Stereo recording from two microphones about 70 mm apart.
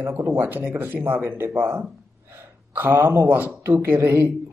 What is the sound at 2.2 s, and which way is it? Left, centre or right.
Gasp, right.